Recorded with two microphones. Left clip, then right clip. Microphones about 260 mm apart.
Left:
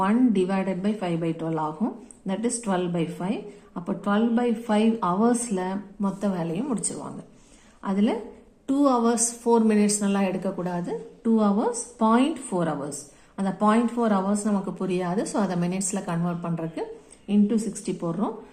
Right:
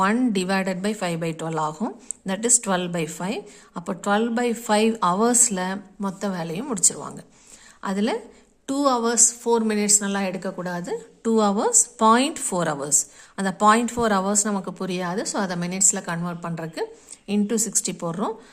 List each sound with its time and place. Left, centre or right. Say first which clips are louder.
0.0 s a woman's voice: right 1 dB; right